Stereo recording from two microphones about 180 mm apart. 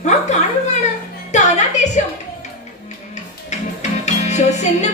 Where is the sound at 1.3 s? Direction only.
40° left (ahead or behind).